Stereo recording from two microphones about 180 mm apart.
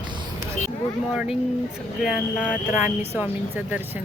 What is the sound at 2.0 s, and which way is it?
Speech, centre (ahead or behind).